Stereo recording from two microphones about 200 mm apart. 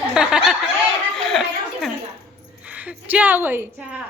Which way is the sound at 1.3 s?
Centre (ahead or behind).